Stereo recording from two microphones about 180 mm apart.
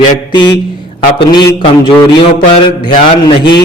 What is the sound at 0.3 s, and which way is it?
Speech, 25° left (ahead or behind).